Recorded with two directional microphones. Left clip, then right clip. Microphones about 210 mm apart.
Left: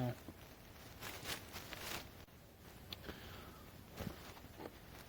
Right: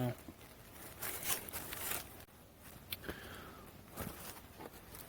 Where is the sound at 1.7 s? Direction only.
50° right (ahead or behind).